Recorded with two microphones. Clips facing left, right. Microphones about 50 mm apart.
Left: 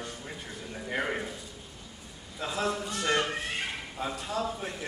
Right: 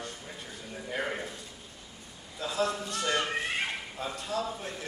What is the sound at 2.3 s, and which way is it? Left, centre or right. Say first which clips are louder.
Speech: even; centre.